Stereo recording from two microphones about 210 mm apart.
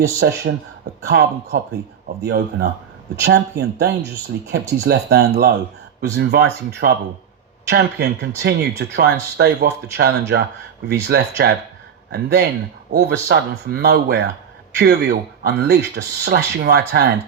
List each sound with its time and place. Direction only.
0.2 s speech: 55° right (ahead or behind)